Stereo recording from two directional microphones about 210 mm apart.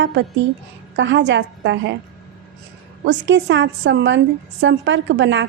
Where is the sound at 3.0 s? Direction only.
55° right (ahead or behind).